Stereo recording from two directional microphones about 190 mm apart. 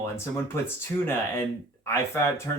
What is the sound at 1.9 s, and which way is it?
Speech, 15° left (ahead or behind).